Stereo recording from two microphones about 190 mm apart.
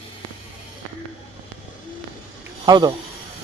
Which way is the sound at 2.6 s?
20° right (ahead or behind).